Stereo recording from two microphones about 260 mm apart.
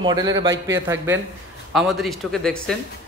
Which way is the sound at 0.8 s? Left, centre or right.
Centre.